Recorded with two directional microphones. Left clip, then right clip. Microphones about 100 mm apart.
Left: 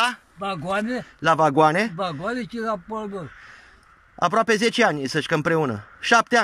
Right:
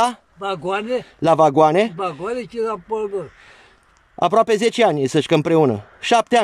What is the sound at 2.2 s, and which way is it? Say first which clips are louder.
Speech: right 4 dB; 15° right (ahead or behind).